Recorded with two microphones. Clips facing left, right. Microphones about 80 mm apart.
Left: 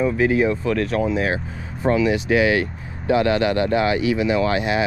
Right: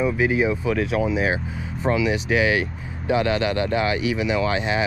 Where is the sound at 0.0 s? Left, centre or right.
Centre.